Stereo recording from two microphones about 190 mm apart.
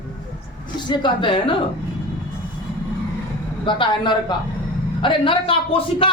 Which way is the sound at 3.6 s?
25° left (ahead or behind).